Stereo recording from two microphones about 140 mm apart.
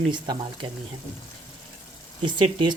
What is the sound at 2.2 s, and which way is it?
Speech, 35° right (ahead or behind).